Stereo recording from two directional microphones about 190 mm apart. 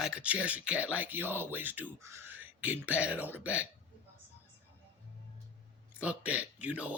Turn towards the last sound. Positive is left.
turn(degrees=-5)  # may be behind; listen again after turning